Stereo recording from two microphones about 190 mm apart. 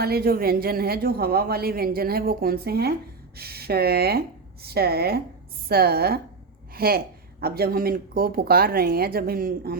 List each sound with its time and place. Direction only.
0.0 s a woman's voice: 55° right (ahead or behind)